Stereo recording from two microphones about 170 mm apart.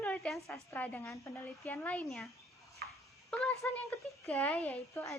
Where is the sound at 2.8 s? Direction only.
70° right (ahead or behind).